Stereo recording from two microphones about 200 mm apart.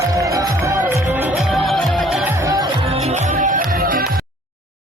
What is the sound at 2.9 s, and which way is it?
Music, 35° right (ahead or behind).